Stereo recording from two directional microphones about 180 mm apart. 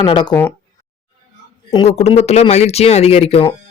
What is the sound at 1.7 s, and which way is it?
Speech, 35° left (ahead or behind).